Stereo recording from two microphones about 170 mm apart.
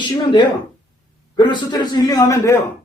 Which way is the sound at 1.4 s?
25° left (ahead or behind).